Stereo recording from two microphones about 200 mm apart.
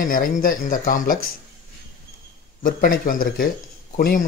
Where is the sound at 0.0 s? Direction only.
45° left (ahead or behind).